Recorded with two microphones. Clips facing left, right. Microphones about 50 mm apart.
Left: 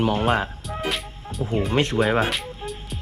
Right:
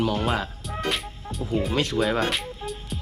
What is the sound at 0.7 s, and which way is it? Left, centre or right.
Music, centre.